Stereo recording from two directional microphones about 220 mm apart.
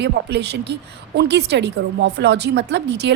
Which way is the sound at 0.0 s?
50° right (ahead or behind).